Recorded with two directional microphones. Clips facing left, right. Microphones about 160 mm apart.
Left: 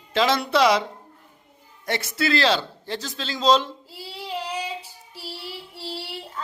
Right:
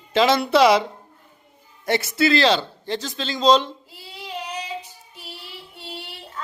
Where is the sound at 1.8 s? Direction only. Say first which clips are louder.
Right 5 dB; 5° right (ahead or behind).